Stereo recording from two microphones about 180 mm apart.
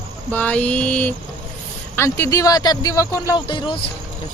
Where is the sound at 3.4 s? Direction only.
30° left (ahead or behind).